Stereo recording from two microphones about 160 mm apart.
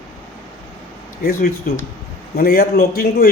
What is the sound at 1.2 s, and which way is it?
A man's voice, 65° left (ahead or behind).